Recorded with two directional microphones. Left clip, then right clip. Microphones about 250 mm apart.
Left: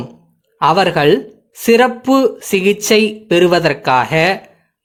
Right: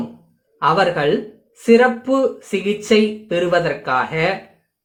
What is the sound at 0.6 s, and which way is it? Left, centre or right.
Speech, left.